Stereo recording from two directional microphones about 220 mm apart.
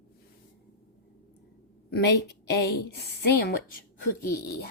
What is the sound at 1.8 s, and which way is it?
A woman's voice, 50° left (ahead or behind).